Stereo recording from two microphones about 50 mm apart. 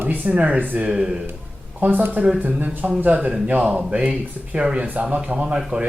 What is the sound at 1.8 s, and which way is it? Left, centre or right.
Speech, right.